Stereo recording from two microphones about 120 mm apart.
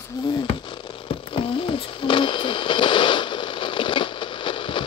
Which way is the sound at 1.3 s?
45° left (ahead or behind).